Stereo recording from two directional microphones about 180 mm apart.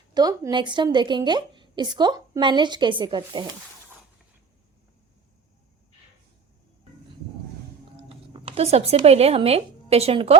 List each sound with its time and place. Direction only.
0.1 s a woman's voice: 20° right (ahead or behind)
7.9 s speech: 35° right (ahead or behind)